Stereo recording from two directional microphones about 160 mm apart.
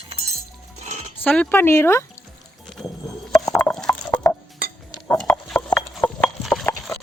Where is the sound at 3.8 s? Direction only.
25° left (ahead or behind).